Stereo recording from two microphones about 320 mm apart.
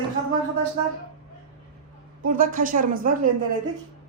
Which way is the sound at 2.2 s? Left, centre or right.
Right.